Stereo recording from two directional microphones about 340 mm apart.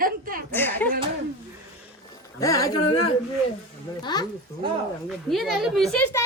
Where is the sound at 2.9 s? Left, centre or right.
Left.